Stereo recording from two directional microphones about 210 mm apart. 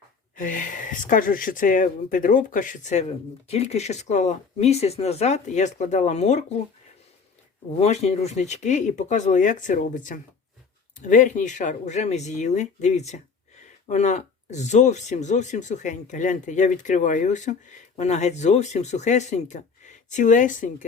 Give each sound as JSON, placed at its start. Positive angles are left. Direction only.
{"t": 0.3, "sound": "speech", "side_deg": 40}
{"t": 7.8, "sound": "speech", "side_deg": 30}